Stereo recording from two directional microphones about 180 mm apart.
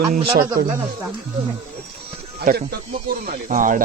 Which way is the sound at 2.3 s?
60° right (ahead or behind).